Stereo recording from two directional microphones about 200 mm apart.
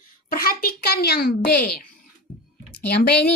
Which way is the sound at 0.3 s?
45° left (ahead or behind).